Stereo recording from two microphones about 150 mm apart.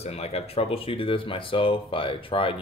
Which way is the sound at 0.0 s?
45° left (ahead or behind).